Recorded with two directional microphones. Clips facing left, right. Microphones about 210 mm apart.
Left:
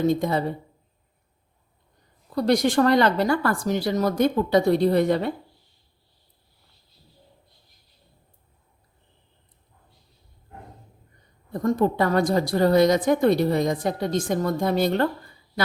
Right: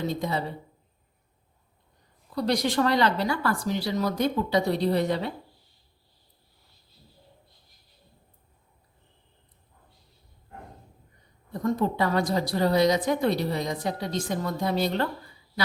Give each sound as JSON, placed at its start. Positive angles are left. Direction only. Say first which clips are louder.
{"t": 0.0, "sound": "a woman's voice", "louder": "left 7 dB", "side_deg": 50}
{"t": 2.3, "sound": "a woman's voice", "louder": "left 5 dB", "side_deg": 50}
{"t": 11.6, "sound": "a woman's voice", "louder": "left 4 dB", "side_deg": 50}